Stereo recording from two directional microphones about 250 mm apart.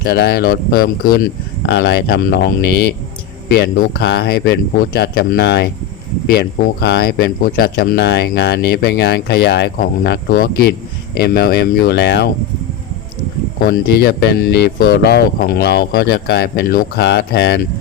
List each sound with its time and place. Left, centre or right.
0.0 s speech: left
13.6 s speech: left